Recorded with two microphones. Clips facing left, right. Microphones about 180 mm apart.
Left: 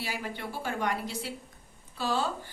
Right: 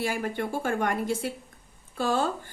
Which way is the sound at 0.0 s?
50° right (ahead or behind).